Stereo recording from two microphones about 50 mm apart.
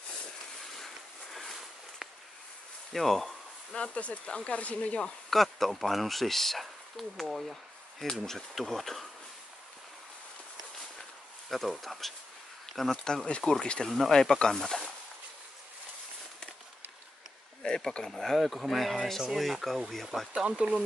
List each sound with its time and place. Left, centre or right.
0.7 s a sound: centre
2.9 s speech: centre
3.7 s speech: left
5.3 s speech: centre
11.4 s speech: centre
12.9 s speech: centre
13.8 s speech: centre
17.6 s speech: centre
20.3 s speech: centre